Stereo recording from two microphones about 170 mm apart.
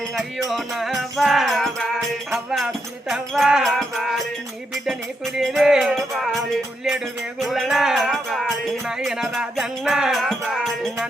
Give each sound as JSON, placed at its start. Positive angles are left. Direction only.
{"t": 0.1, "sound": "music", "side_deg": 0}